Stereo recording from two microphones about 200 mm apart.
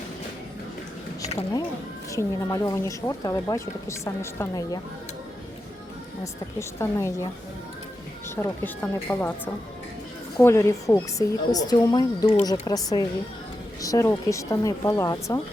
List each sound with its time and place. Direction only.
2.1 s speech: 15° left (ahead or behind)
6.6 s speech: 15° left (ahead or behind)
8.4 s speech: 10° left (ahead or behind)